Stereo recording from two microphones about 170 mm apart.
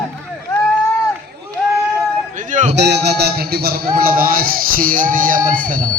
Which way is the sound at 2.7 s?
80° right.